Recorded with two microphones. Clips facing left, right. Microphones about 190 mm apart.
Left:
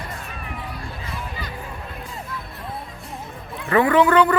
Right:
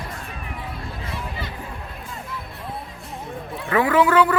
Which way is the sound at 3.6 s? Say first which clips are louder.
Left 2 dB; 5° right (ahead or behind).